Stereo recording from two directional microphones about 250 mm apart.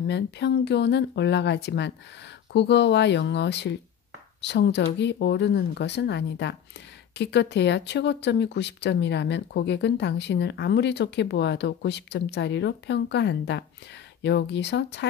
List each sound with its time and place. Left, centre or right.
0.0 s speech: left